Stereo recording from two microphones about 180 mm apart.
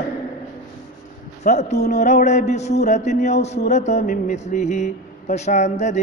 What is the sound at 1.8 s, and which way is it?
Music, 40° left (ahead or behind).